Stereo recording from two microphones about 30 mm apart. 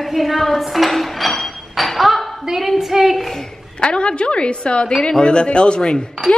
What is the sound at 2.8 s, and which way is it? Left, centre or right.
Speech, centre.